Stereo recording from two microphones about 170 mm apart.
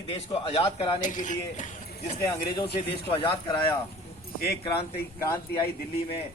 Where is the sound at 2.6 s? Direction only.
30° left (ahead or behind).